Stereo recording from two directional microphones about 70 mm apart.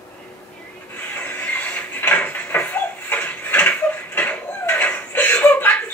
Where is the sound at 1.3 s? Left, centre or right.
Left.